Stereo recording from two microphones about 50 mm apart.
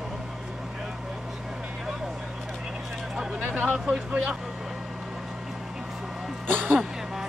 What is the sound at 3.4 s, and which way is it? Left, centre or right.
Speech, right.